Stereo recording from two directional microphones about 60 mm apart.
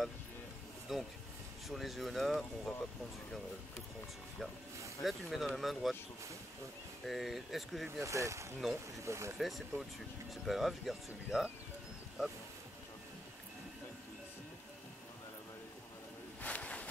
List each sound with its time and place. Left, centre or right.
0.9 s speech: centre
5.0 s speech: centre
7.1 s speech: centre
8.0 s speech: right
8.5 s speech: centre
9.0 s speech: right
9.4 s speech: centre
16.4 s a sound: left